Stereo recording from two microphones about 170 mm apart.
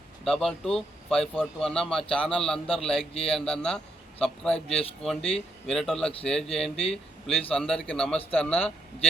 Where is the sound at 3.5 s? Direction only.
5° left (ahead or behind).